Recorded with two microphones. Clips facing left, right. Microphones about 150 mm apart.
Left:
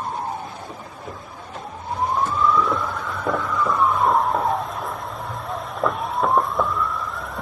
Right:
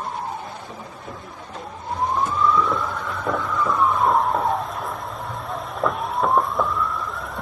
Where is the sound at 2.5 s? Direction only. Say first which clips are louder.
Even; centre (ahead or behind).